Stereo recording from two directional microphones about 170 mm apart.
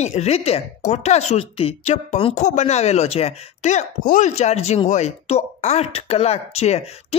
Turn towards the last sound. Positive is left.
turn(degrees=40)  # may be behind; listen again after turning